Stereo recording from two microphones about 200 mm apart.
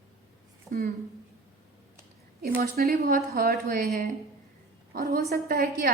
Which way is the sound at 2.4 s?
45° right (ahead or behind).